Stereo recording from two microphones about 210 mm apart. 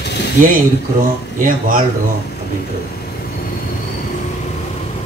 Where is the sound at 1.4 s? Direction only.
40° right (ahead or behind).